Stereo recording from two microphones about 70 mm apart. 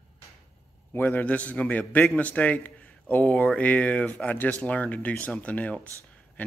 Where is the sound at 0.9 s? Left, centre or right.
Left.